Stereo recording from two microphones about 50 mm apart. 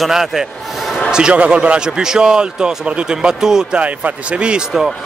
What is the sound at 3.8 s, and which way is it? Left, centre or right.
Speech, right.